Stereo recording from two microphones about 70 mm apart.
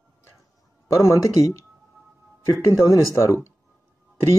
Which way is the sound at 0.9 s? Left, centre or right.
Left.